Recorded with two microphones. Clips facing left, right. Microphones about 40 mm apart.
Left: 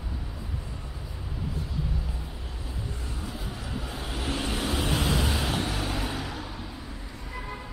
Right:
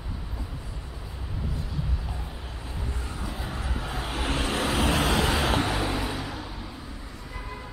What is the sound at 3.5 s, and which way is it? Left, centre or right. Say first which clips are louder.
Vehicle: right 3 dB; right.